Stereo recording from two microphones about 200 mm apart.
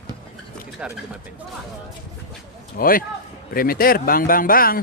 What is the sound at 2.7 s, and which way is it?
A man's voice, 45° left (ahead or behind).